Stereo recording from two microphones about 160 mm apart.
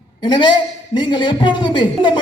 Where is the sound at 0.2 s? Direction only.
30° left (ahead or behind).